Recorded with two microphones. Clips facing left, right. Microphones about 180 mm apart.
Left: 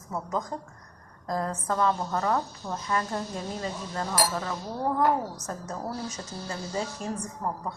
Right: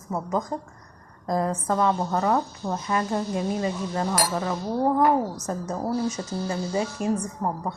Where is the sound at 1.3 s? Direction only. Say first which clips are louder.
Right 5 dB; 15° right (ahead or behind).